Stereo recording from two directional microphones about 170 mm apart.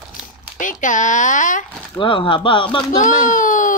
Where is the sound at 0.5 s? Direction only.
50° left (ahead or behind).